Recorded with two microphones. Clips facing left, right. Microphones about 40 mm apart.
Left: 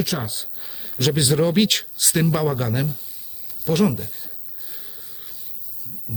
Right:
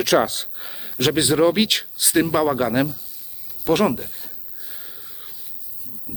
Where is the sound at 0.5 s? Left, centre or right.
Right; by 2.8 s centre.